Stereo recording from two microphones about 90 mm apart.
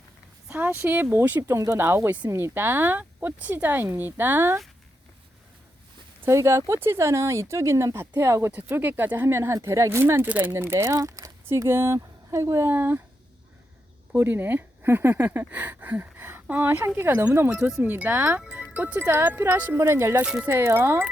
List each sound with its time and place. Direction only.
0.5 s speech: 25° right (ahead or behind)
1.4 s speech: 35° right (ahead or behind)
2.3 s speech: 25° right (ahead or behind)
6.2 s a woman's voice: 30° right (ahead or behind)
14.2 s speech: 25° right (ahead or behind)
20.2 s speech: 10° right (ahead or behind)
20.5 s speech: 30° right (ahead or behind)